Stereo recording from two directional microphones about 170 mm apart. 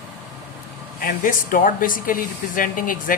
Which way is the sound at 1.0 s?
55° left (ahead or behind).